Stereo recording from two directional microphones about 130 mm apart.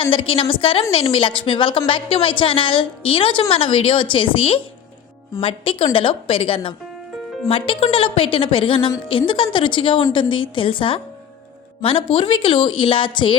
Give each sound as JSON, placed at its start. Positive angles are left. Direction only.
{"t": 0.0, "sound": "a woman's voice", "side_deg": 45}